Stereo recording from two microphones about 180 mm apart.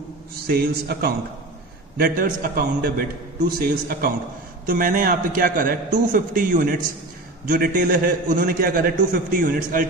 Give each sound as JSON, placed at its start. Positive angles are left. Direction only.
{"t": 0.5, "sound": "a man's voice", "side_deg": -60}